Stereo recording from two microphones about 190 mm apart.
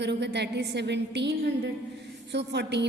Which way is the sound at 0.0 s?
65° right (ahead or behind).